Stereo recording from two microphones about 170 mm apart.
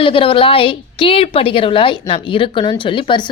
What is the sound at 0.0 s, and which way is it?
A woman's voice, 30° left (ahead or behind).